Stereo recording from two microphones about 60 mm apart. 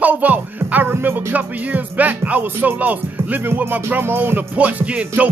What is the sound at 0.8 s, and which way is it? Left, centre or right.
Music, right.